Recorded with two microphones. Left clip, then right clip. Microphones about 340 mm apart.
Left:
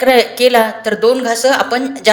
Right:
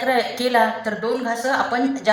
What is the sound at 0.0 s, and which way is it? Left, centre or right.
A woman's voice, left.